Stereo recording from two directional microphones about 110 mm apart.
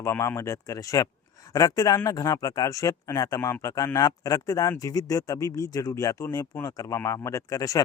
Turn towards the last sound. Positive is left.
turn(degrees=30)  # may be behind; listen again after turning